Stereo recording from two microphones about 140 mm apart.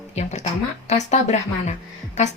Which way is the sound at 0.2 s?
55° left (ahead or behind).